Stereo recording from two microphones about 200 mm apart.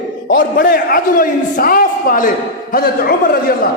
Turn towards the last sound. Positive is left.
turn(degrees=50)  # may be behind; listen again after turning